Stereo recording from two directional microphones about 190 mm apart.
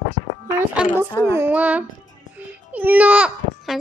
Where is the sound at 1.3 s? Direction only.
10° right (ahead or behind).